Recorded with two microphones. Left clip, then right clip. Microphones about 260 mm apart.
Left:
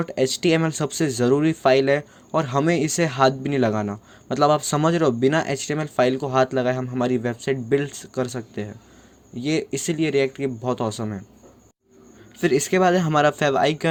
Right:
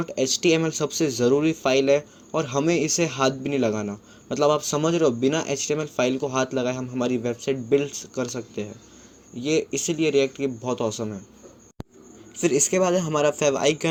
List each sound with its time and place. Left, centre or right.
0.0 s speech: left
12.4 s speech: left